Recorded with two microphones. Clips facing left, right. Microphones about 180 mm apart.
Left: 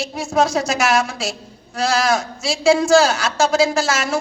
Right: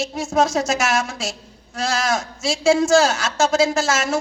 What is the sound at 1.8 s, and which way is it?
A woman's voice, 25° right (ahead or behind).